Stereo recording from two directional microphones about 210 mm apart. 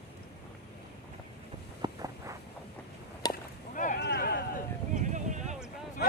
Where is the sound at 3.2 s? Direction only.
20° left (ahead or behind).